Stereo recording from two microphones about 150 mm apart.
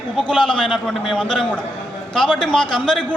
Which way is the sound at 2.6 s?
35° left (ahead or behind).